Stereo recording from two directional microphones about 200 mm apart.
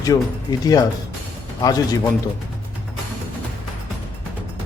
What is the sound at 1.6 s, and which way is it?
Speech, 20° left (ahead or behind).